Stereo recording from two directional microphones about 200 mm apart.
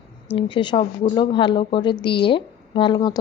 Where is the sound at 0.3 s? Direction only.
25° left (ahead or behind).